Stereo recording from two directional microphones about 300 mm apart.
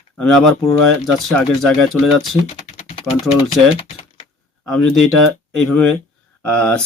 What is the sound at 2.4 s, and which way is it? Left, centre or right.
Typing, left.